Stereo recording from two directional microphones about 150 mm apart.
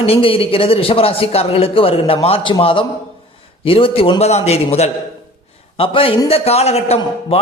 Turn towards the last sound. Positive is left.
turn(degrees=45)  # may be behind; listen again after turning